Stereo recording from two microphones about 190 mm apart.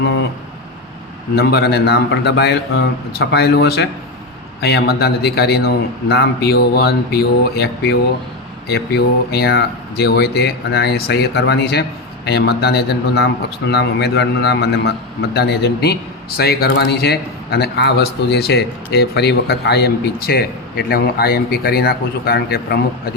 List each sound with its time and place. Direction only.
1.4 s speech: 60° left (ahead or behind)